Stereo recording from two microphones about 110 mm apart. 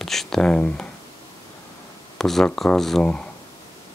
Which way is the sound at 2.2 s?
5° left (ahead or behind).